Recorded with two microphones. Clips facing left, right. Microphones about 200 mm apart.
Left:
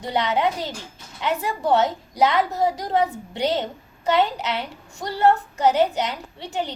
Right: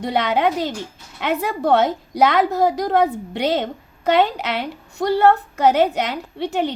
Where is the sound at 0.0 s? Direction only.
65° right (ahead or behind).